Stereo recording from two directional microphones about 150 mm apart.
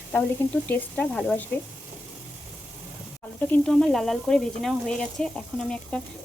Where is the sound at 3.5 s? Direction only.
5° left (ahead or behind).